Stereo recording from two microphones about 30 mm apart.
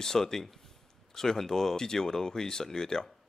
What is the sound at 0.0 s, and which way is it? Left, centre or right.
Speech, centre.